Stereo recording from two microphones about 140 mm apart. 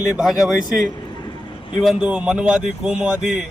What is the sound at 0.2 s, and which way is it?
Speech, 5° right (ahead or behind).